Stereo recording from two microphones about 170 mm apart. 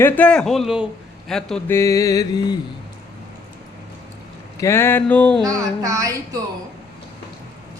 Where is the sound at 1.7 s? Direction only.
20° left (ahead or behind).